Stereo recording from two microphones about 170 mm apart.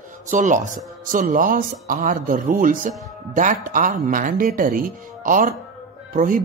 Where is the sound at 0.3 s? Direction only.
50° right (ahead or behind).